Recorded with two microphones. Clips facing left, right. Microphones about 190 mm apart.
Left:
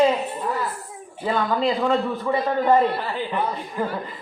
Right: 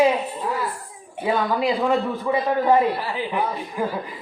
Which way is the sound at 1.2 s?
10° right (ahead or behind).